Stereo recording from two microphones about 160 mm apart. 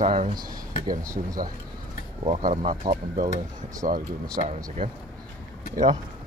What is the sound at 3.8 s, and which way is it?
Speech, 60° right (ahead or behind).